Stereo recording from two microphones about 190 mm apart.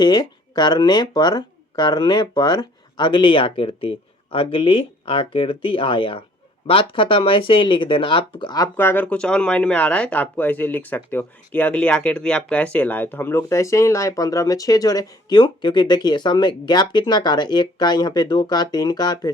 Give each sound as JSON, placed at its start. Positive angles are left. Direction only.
{"t": 0.0, "sound": "speech", "side_deg": 20}